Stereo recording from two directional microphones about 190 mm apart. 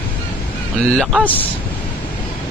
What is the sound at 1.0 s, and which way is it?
Speech, 5° left (ahead or behind).